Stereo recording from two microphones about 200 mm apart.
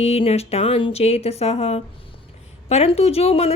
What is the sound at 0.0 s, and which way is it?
Speech, 30° left (ahead or behind).